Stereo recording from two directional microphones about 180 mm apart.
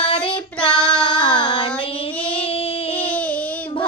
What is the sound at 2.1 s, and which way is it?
Child singing, 5° left (ahead or behind).